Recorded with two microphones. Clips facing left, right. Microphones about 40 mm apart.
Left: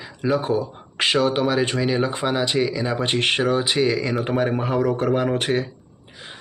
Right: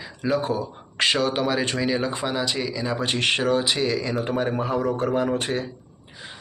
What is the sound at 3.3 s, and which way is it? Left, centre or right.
Speech, centre.